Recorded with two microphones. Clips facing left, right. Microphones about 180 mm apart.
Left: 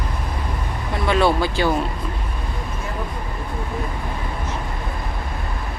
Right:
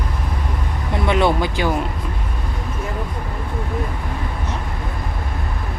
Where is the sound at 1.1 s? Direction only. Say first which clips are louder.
Even; 20° right (ahead or behind).